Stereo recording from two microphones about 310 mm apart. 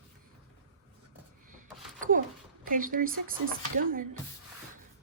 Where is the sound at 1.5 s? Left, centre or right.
Right.